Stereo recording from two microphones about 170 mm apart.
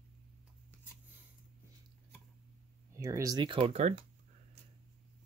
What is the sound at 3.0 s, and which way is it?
Speech, 20° right (ahead or behind).